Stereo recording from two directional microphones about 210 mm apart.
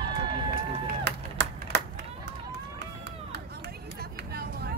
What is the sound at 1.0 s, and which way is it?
Chop, 55° right (ahead or behind).